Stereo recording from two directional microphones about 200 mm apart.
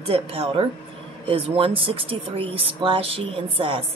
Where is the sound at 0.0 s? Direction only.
30° right (ahead or behind).